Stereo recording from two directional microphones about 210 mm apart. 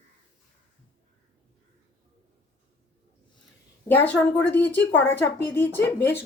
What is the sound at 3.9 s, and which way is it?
Speech, 10° left (ahead or behind).